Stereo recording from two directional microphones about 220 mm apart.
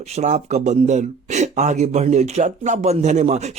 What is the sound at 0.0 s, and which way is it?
Speech, 30° right (ahead or behind).